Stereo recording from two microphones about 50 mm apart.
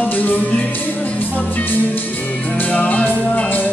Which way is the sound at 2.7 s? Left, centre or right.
Left.